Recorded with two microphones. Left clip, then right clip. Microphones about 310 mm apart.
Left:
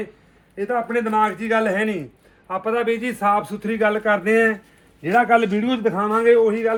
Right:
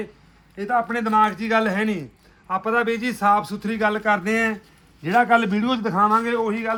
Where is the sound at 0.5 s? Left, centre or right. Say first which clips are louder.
Left 1 dB; centre.